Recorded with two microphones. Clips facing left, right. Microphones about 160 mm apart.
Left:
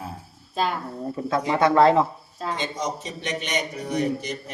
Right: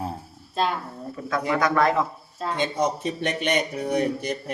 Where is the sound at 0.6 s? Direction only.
Centre (ahead or behind).